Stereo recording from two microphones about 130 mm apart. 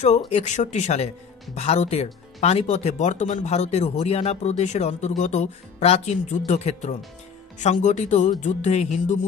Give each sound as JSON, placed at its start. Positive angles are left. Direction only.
{"t": 0.3, "sound": "speech", "side_deg": 65}
{"t": 7.5, "sound": "music", "side_deg": 70}